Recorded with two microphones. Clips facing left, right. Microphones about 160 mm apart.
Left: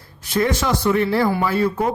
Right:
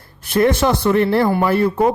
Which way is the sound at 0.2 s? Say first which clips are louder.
Right 5 dB; 55° right (ahead or behind).